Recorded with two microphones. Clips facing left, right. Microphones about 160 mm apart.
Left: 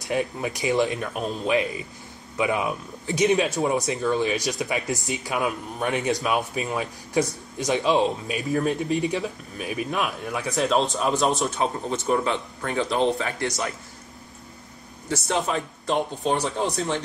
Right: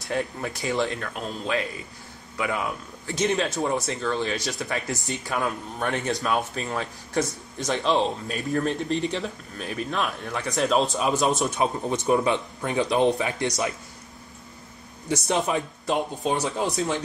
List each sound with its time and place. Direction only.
0.1 s speech: 15° left (ahead or behind)
5.0 s speech: 5° left (ahead or behind)
11.5 s speech: 15° right (ahead or behind)
15.2 s speech: 20° right (ahead or behind)
15.9 s speech: 5° right (ahead or behind)